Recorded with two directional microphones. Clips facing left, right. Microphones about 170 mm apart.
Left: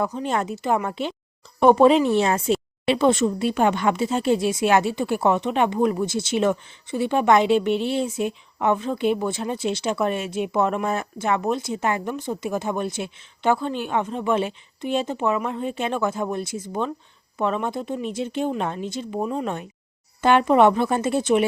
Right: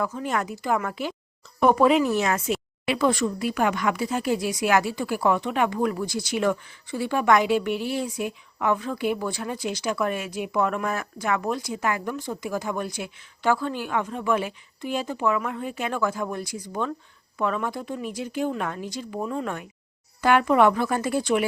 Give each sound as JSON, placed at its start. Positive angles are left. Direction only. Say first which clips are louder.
{"t": 0.0, "sound": "a woman's voice", "louder": "left 3 dB", "side_deg": 25}